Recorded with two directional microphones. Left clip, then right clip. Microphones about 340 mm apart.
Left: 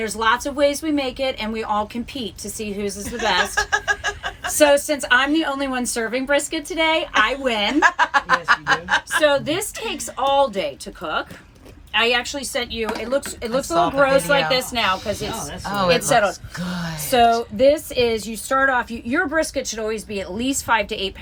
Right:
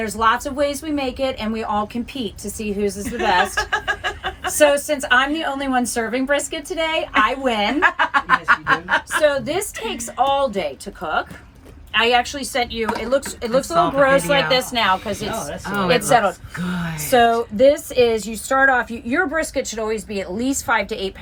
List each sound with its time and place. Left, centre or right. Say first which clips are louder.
0.0 s speech: right 1 dB; centre
15.7 s speech: right 1 dB; centre
19.4 s speech: even; left
20.4 s speech: even; centre